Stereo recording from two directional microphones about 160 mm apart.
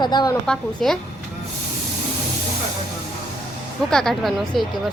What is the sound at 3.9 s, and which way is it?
Speech, 5° left (ahead or behind).